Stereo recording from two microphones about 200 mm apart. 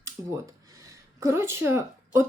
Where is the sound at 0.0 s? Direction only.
15° right (ahead or behind).